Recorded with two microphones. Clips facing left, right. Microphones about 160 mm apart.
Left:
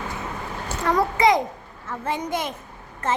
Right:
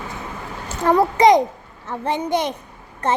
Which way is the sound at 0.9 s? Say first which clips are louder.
Right 5 dB; 30° right (ahead or behind).